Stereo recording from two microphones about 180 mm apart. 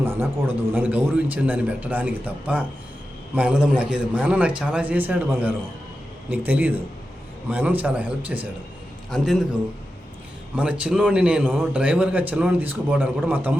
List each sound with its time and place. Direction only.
0.0 s a man's voice: 10° right (ahead or behind)
10.5 s a man's voice: 5° right (ahead or behind)